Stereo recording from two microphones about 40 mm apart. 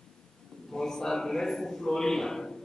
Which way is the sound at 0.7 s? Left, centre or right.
Centre.